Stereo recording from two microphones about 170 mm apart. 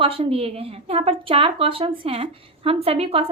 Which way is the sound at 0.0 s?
35° right (ahead or behind).